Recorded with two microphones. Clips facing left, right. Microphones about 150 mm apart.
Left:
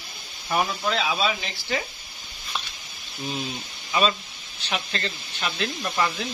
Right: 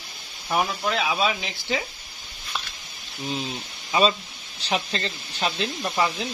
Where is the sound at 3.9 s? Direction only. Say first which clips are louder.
Right 2 dB; 30° right (ahead or behind).